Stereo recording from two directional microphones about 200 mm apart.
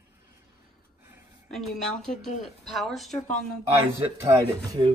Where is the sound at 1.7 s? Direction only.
Centre (ahead or behind).